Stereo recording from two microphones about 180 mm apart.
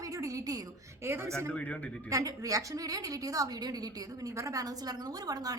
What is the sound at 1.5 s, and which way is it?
Speech, 10° left (ahead or behind).